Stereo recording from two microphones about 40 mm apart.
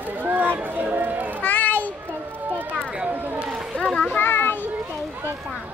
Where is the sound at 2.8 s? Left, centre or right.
Right.